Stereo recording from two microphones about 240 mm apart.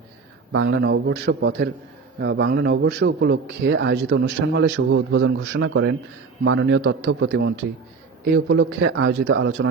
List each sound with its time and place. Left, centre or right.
0.5 s a man's voice: right